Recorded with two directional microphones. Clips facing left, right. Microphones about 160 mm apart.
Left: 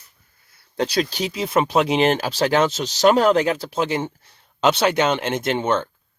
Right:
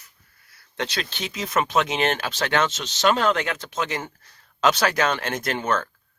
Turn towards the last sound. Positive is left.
turn(degrees=25)  # may be behind; listen again after turning